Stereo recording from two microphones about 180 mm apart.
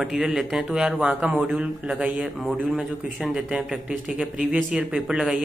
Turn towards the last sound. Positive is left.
turn(degrees=-5)  # may be behind; listen again after turning